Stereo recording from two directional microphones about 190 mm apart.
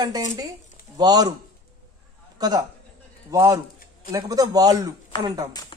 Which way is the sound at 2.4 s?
20° right (ahead or behind).